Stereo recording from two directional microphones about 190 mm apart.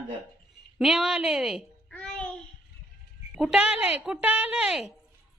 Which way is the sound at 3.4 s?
5° right (ahead or behind).